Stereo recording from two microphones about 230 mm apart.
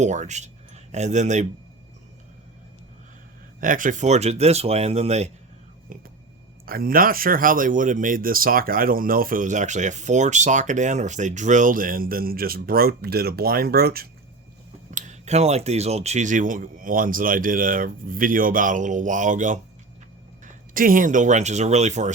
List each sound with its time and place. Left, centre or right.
0.0 s speech: right
3.6 s speech: right